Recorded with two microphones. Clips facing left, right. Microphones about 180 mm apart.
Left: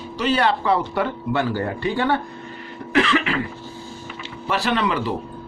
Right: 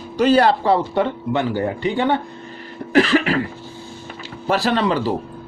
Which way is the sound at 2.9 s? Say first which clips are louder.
Right 4 dB; 35° right (ahead or behind).